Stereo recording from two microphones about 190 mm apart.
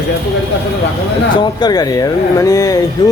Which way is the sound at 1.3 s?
25° left (ahead or behind).